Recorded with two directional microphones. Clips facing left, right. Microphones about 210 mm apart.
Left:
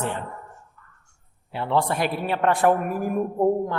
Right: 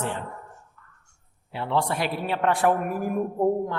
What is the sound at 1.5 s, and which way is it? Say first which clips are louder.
A woman's voice: left 2 dB; 50° left (ahead or behind).